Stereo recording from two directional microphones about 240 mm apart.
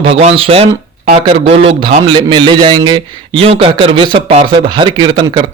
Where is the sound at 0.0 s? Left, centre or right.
Right.